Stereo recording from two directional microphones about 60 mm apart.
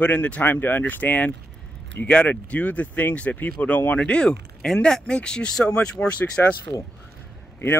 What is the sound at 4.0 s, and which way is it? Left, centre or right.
Speech, centre.